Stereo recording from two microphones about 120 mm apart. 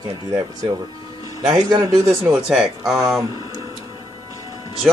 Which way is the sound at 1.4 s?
30° right (ahead or behind).